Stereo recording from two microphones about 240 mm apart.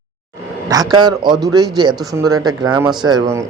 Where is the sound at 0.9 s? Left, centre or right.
Centre.